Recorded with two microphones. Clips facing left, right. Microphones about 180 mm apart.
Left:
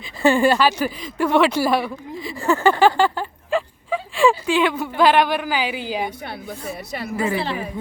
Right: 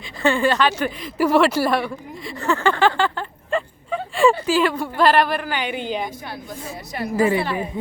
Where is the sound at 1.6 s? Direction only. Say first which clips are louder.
Left 1 dB; centre (ahead or behind).